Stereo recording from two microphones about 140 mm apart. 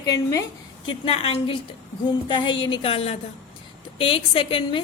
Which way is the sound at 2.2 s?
35° left (ahead or behind).